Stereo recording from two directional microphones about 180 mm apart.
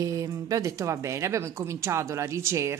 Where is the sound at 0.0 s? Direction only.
20° right (ahead or behind).